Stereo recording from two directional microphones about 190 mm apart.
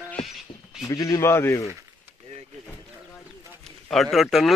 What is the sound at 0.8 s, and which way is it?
Speech, 15° left (ahead or behind).